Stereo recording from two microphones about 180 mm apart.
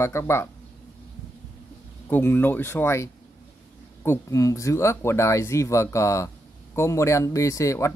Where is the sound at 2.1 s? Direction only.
10° left (ahead or behind).